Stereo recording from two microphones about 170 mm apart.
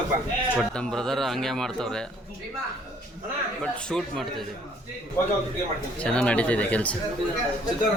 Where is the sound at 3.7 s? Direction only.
5° left (ahead or behind).